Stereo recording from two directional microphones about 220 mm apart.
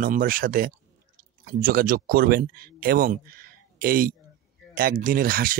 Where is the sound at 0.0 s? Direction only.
40° right (ahead or behind).